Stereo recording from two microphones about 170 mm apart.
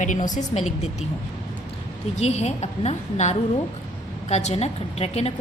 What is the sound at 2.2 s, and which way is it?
A woman's voice, 40° left (ahead or behind).